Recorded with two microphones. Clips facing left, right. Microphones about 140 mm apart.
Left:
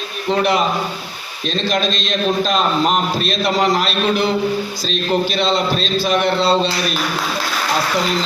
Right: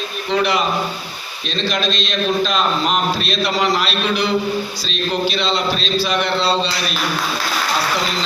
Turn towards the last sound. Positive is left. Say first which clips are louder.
# left 3 dB
turn(degrees=50)  # may be behind; listen again after turning